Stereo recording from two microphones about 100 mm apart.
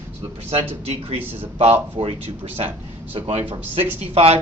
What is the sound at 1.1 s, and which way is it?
Speech, 20° right (ahead or behind).